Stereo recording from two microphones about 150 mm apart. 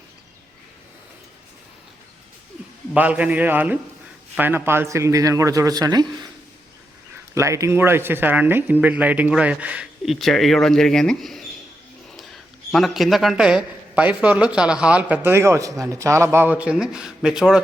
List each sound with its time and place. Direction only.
2.9 s speech: 10° right (ahead or behind); by 6.1 s 25° right (ahead or behind)
7.3 s speech: 20° right (ahead or behind); by 17.6 s 5° right (ahead or behind)